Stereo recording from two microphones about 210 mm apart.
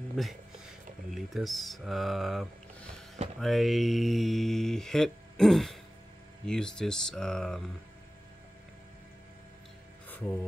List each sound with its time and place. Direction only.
0.2 s speech: centre (ahead or behind)